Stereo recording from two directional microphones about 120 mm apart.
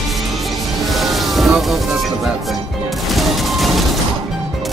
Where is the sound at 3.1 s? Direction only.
Centre (ahead or behind).